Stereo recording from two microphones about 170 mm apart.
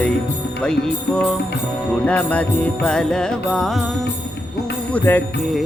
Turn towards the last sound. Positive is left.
turn(degrees=10)  # may be behind; listen again after turning